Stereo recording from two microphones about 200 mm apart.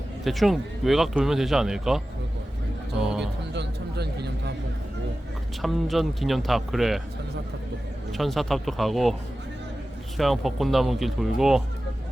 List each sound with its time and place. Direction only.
0.3 s speech: centre (ahead or behind)
3.0 s a sound: 5° right (ahead or behind)
3.5 s a sound: 55° right (ahead or behind)
5.6 s speech: centre (ahead or behind)
8.1 s speech: centre (ahead or behind)
10.2 s speech: centre (ahead or behind)